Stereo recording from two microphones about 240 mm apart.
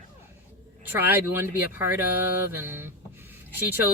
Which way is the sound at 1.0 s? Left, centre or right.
Centre.